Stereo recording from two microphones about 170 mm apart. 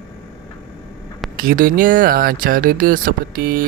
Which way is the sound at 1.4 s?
55° right (ahead or behind).